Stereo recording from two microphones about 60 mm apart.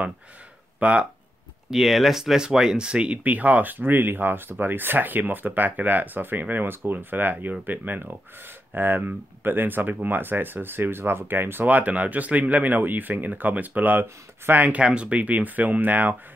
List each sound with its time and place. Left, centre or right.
0.7 s speech: right
1.7 s speech: centre; by 14.8 s right
14.8 s speech: centre